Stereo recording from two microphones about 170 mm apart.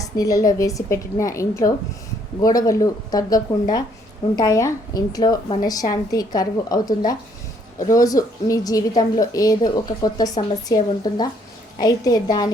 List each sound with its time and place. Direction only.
0.0 s a woman's voice: 20° left (ahead or behind)